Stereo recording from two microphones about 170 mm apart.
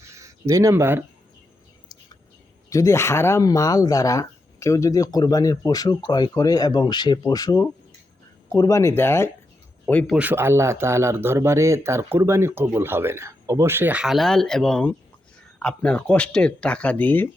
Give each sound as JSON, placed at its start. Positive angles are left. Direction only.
{"t": 0.0, "sound": "a sound", "side_deg": -15}
{"t": 2.6, "sound": "speech", "side_deg": 20}
{"t": 10.2, "sound": "speech", "side_deg": -10}